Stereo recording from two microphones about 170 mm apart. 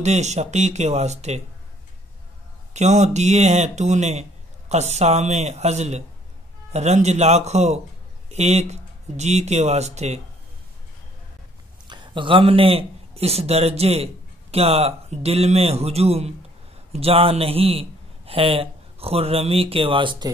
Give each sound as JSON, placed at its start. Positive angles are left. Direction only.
{"t": 0.0, "sound": "speech", "side_deg": -40}
{"t": 2.7, "sound": "speech", "side_deg": -40}
{"t": 11.9, "sound": "speech", "side_deg": -30}